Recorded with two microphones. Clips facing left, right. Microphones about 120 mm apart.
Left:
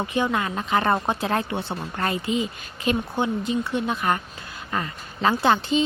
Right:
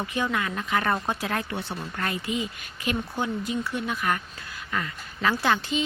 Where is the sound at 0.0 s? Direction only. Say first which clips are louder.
Left 4 dB; 25° left (ahead or behind).